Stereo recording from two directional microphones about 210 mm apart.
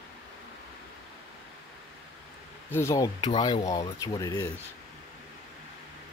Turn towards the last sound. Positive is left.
turn(degrees=20)  # may be behind; listen again after turning